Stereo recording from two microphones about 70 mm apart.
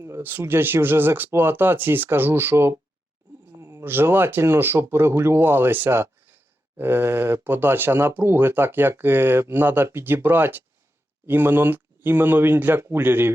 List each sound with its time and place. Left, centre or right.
0.2 s speech: right